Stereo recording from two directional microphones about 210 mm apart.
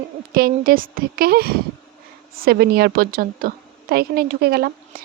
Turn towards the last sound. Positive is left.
turn(degrees=-50)  # may be behind; listen again after turning